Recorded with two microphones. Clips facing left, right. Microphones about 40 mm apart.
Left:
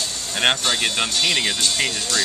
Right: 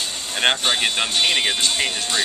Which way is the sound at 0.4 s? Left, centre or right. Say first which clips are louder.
Even; centre.